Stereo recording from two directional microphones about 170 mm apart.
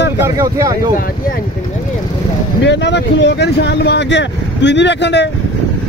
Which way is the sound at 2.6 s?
90° left.